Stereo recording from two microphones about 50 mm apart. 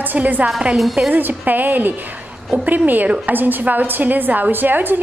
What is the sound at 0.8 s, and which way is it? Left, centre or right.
Speech, centre.